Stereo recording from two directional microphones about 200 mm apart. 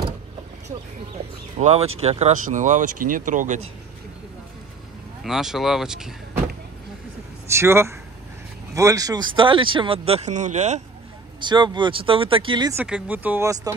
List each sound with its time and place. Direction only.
1.6 s speech: 35° right (ahead or behind)
5.2 s speech: centre (ahead or behind)
7.4 s speech: 15° right (ahead or behind); by 10.8 s 35° right (ahead or behind)
11.4 s speech: 25° right (ahead or behind)
12.7 s speech: 5° right (ahead or behind)